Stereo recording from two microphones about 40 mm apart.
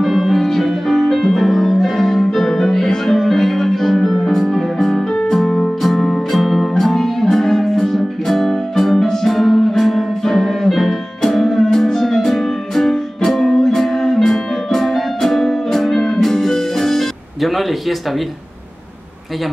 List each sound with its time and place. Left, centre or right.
0.0 s music: centre